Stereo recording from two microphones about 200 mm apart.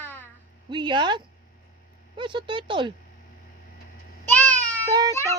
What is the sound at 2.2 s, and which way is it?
Speech, 25° right (ahead or behind).